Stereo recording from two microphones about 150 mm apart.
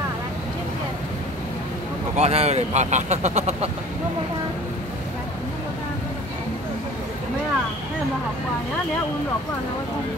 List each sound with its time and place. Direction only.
2.1 s speech: 45° right (ahead or behind)